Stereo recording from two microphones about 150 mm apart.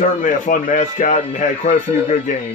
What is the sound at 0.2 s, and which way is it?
Speech, 60° left (ahead or behind).